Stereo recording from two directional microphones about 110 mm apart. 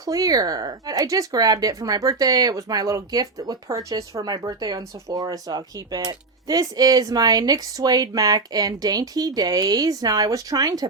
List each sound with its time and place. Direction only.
0.0 s speech: 35° right (ahead or behind)